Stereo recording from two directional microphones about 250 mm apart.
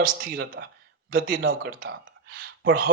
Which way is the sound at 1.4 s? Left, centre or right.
Right.